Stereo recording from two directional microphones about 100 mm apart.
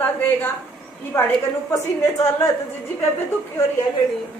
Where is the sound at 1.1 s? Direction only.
30° left (ahead or behind).